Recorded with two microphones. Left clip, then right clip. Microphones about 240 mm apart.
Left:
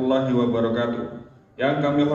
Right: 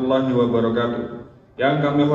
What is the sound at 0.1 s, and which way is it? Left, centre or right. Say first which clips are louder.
A man's voice: right 4 dB; left.